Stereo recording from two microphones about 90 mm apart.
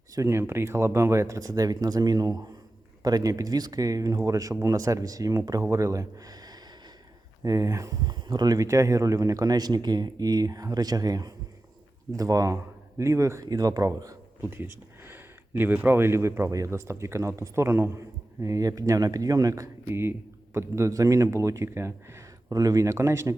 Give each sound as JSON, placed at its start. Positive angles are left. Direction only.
{"t": 0.1, "sound": "speech", "side_deg": -35}
{"t": 8.0, "sound": "speech", "side_deg": -50}
{"t": 8.5, "sound": "speech", "side_deg": -35}
{"t": 14.5, "sound": "speech", "side_deg": -25}
{"t": 18.4, "sound": "speech", "side_deg": -35}